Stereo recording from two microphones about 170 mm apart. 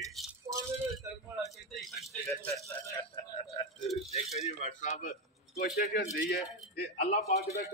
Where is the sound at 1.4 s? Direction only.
Centre (ahead or behind).